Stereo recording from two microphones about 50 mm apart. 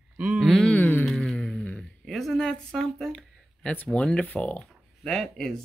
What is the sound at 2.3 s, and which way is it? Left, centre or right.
Speech, centre.